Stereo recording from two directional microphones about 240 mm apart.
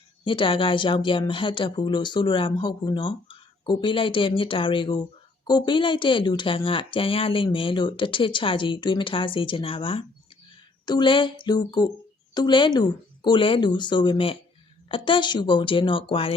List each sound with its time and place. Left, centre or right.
0.3 s speech: left